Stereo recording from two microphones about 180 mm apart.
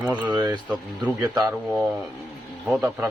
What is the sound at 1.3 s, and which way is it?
Speech, 20° right (ahead or behind).